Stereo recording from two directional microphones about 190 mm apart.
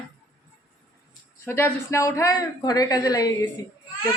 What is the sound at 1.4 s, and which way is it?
Speech, 15° left (ahead or behind).